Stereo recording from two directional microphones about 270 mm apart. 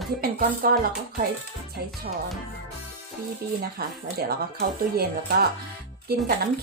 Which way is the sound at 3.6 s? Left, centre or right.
Right.